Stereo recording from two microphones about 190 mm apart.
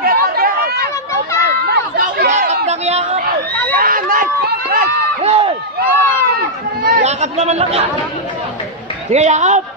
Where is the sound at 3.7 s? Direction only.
50° right (ahead or behind).